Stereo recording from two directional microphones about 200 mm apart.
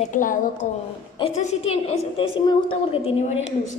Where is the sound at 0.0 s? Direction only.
40° left (ahead or behind).